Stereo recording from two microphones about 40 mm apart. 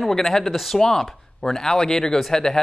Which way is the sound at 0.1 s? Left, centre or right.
Centre.